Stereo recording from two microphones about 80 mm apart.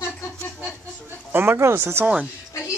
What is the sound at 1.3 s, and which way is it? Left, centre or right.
Speech, right.